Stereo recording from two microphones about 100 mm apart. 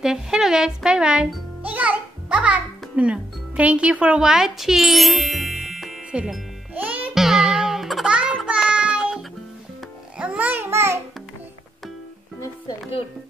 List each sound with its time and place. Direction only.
0.0 s a child's voice: 5° right (ahead or behind)
6.1 s music: 10° right (ahead or behind)
7.2 s music: 5° right (ahead or behind)
8.5 s child singing: 10° right (ahead or behind)
10.1 s a child's voice: 15° right (ahead or behind)